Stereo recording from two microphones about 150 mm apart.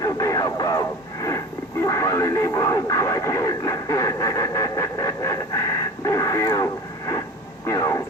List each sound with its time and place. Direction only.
0.0 s radio: 20° left (ahead or behind)
7.7 s radio: 20° left (ahead or behind)